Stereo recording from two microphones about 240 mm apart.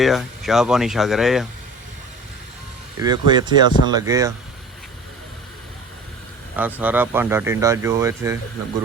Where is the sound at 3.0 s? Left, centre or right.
Centre.